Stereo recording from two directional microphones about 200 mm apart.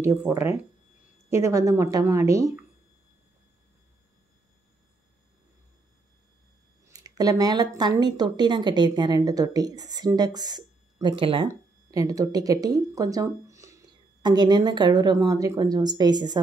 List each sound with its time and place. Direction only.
0.0 s a woman's voice: 15° right (ahead or behind)
6.9 s speech: 20° right (ahead or behind)